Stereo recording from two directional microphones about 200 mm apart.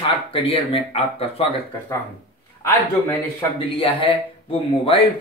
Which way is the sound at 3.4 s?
25° left (ahead or behind).